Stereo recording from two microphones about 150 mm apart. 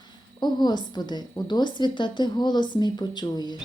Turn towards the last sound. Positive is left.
turn(degrees=30)  # may be behind; listen again after turning